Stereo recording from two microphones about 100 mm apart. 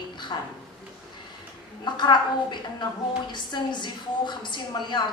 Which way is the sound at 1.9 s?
50° left (ahead or behind).